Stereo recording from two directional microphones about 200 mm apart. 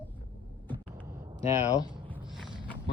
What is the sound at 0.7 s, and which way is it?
Vehicle, 10° left (ahead or behind).